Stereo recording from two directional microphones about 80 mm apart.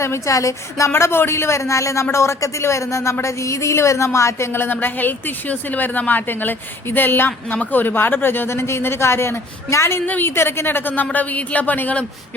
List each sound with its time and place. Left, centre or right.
0.0 s a woman's voice: left; by 12.0 s centre